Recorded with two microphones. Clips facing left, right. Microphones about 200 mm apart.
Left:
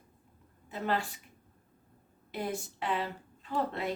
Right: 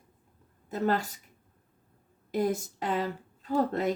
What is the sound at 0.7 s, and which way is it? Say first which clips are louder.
Speech: right 5 dB; 40° right (ahead or behind).